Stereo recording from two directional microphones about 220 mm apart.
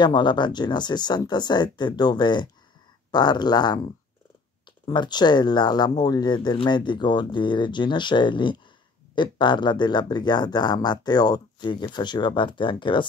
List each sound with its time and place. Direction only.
0.0 s speech: 20° left (ahead or behind)
4.8 s speech: 20° left (ahead or behind)